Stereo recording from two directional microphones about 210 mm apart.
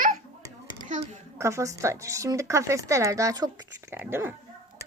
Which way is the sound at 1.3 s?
15° right (ahead or behind).